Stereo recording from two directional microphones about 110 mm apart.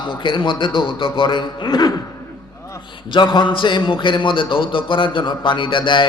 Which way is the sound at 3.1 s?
45° left (ahead or behind).